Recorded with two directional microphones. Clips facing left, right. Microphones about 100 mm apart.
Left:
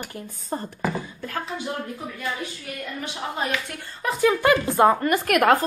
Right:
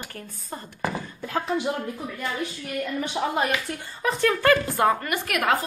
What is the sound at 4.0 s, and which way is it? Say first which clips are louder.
A woman's voice: left 2 dB; 5° left (ahead or behind).